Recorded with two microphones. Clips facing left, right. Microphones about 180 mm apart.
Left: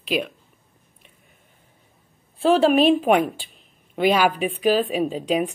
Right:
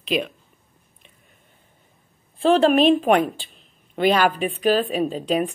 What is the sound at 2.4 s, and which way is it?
A man's voice, 5° left (ahead or behind).